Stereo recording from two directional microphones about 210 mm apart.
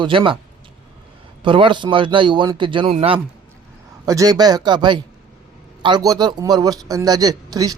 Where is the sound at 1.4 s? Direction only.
25° right (ahead or behind).